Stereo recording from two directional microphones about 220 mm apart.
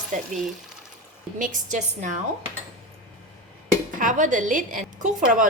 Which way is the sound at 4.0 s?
35° right (ahead or behind).